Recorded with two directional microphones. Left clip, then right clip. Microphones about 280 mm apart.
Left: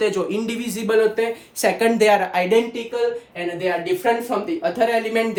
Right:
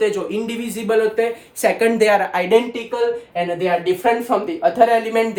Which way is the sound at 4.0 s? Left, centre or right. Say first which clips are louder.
Right 3 dB; centre.